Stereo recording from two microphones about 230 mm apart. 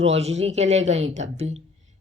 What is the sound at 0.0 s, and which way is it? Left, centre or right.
Speech, right.